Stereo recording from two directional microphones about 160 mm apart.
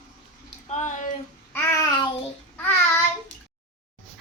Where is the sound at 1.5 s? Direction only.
15° left (ahead or behind).